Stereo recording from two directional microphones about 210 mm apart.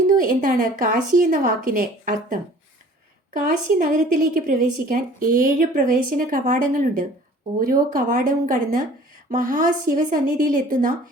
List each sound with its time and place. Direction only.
0.3 s a woman's voice: 40° right (ahead or behind)